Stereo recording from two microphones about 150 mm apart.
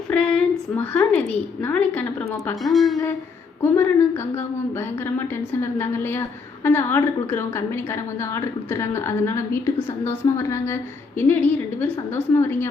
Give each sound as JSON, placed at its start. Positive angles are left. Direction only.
{"t": 0.1, "sound": "a sound", "side_deg": 5}
{"t": 1.6, "sound": "a woman's voice", "side_deg": 10}
{"t": 3.6, "sound": "a woman's voice", "side_deg": 15}